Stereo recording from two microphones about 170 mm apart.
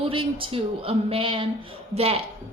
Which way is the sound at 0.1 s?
30° right (ahead or behind).